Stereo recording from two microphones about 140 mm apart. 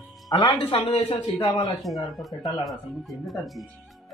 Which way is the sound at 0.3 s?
30° left (ahead or behind).